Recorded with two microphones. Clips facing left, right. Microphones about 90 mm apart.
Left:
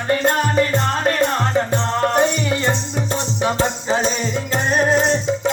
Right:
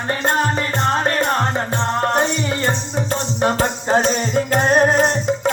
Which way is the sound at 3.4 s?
45° right (ahead or behind).